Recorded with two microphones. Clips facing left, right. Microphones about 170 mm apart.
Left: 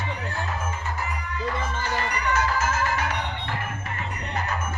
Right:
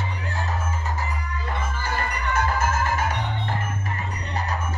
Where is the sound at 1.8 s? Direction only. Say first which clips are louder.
Left 1 dB; 55° right (ahead or behind).